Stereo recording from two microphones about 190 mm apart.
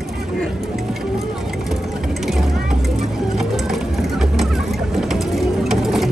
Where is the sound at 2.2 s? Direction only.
Centre (ahead or behind).